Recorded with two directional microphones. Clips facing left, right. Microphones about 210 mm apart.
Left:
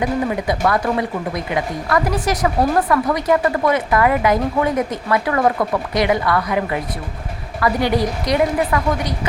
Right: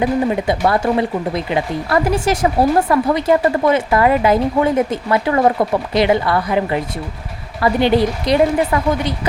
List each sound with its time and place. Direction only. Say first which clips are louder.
0.0 s a woman's voice: right 3 dB; 25° right (ahead or behind)